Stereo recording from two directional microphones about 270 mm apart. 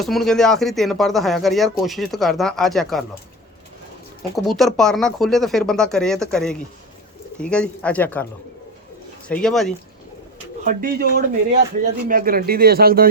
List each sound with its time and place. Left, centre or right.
0.0 s speech: centre
4.4 s speech: centre
9.3 s speech: centre
10.6 s speech: right